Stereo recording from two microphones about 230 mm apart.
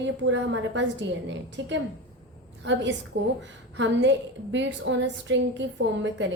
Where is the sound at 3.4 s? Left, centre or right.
Right.